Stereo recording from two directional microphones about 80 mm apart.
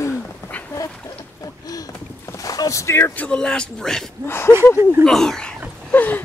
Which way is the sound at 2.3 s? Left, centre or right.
Left.